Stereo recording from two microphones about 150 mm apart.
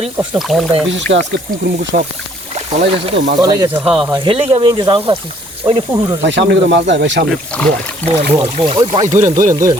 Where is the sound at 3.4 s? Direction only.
25° right (ahead or behind).